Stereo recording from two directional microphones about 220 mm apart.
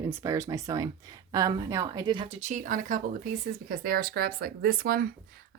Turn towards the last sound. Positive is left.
turn(degrees=-45)  # may be behind; listen again after turning